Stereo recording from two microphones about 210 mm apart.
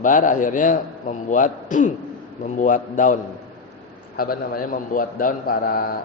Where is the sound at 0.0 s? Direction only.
40° left (ahead or behind).